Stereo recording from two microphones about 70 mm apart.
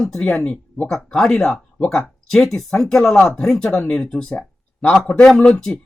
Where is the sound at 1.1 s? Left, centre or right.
Centre.